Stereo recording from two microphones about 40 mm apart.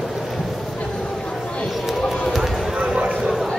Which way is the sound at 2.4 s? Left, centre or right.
Right.